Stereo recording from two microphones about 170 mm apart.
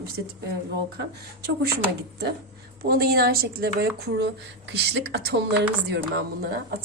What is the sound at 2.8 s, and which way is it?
A woman's voice, 65° right (ahead or behind).